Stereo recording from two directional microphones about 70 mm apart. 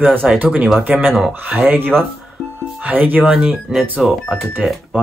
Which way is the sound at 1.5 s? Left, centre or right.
Right.